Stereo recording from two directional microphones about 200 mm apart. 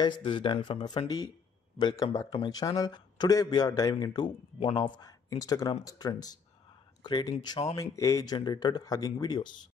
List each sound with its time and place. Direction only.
0.0 s speech: 25° left (ahead or behind)